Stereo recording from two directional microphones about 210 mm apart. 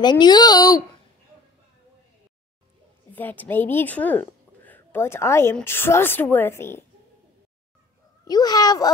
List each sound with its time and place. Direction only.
0.0 s speech: 20° left (ahead or behind)
3.1 s speech: 10° left (ahead or behind)
8.3 s speech: 20° left (ahead or behind)